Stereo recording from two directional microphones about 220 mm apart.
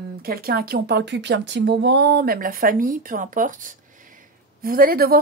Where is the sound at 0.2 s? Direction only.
40° right (ahead or behind).